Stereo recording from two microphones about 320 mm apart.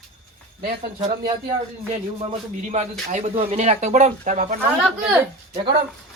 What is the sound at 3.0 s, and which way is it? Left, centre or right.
Speech, right.